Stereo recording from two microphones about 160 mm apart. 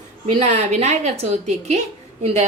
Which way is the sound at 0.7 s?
45° right (ahead or behind).